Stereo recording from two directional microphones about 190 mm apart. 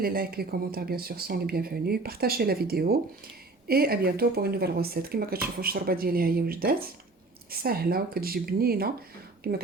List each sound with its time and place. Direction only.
0.0 s speech: 50° right (ahead or behind)